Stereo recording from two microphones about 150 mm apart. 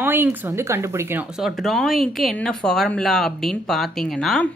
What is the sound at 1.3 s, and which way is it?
Speech, centre (ahead or behind).